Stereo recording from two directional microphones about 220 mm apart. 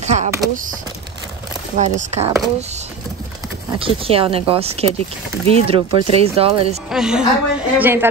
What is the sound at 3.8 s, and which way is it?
Speech, 25° right (ahead or behind).